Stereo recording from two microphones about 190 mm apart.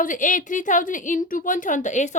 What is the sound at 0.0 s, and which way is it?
A woman's voice, 45° left (ahead or behind).